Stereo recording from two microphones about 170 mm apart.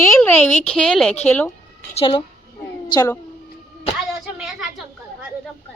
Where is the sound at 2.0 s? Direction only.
30° left (ahead or behind).